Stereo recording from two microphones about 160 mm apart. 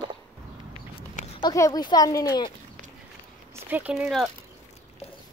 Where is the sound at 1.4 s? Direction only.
25° left (ahead or behind).